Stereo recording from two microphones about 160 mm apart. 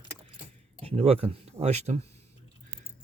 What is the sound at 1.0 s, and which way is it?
Speech, 40° right (ahead or behind).